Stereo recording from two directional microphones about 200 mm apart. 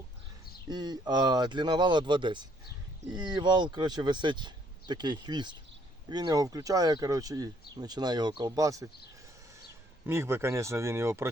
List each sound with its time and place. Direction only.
0.7 s speech: 20° right (ahead or behind)
10.1 s speech: 15° right (ahead or behind)